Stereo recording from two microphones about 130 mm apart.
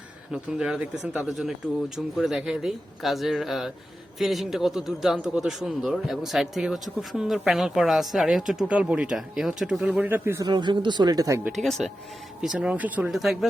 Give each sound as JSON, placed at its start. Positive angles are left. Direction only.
{"t": 0.3, "sound": "a man's voice", "side_deg": -5}
{"t": 10.5, "sound": "speech", "side_deg": -35}
{"t": 11.6, "sound": "a man's voice", "side_deg": 0}